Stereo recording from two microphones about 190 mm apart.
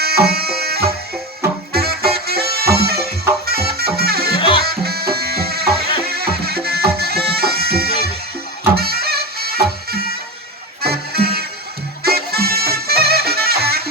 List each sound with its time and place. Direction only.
0.0 s music: 55° right (ahead or behind)
4.4 s music: 25° left (ahead or behind)
4.6 s music: 55° right (ahead or behind)